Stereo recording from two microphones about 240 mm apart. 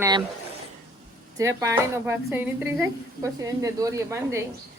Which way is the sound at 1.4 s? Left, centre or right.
Centre.